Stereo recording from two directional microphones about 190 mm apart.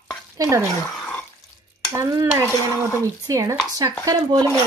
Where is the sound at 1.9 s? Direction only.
15° right (ahead or behind).